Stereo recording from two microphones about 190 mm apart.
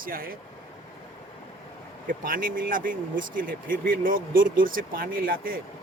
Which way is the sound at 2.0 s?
50° right (ahead or behind).